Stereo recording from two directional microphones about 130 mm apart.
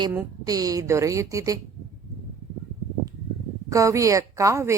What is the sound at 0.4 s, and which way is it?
A woman's voice, 30° right (ahead or behind).